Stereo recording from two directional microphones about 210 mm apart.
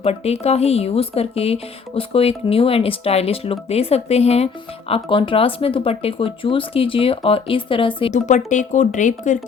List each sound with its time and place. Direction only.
0.0 s speech: 30° left (ahead or behind)
8.1 s speech: 35° left (ahead or behind)